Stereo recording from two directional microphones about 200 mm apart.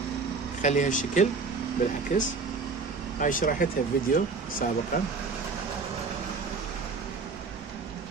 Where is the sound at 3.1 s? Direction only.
40° left (ahead or behind).